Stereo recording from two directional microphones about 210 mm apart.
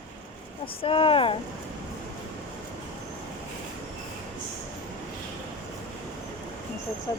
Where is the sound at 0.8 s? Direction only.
25° left (ahead or behind).